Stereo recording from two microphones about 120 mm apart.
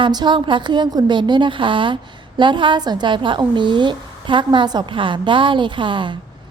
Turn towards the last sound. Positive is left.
turn(degrees=-40)  # may be behind; listen again after turning